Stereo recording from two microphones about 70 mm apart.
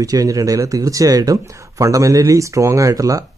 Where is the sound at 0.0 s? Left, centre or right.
Right.